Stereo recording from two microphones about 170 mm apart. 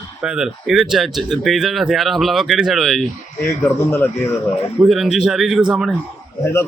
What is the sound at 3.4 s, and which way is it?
Speech, 15° left (ahead or behind).